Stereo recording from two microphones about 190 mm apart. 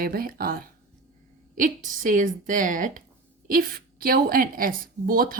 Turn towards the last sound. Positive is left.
turn(degrees=-50)  # may be behind; listen again after turning